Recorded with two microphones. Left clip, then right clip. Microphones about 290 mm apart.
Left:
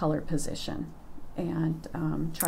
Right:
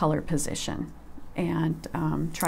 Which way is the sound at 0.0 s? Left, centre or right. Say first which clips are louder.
Right 3 dB; right.